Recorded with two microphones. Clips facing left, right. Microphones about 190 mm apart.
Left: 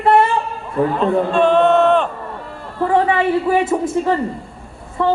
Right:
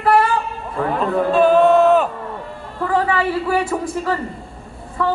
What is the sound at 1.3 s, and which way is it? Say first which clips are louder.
Speech: right 2 dB; 5° right (ahead or behind).